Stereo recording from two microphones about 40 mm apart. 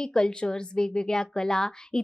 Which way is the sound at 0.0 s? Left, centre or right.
Centre.